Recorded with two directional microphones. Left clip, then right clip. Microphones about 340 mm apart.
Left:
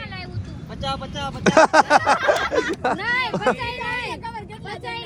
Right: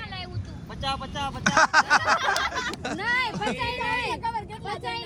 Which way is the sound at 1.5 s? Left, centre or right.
Centre.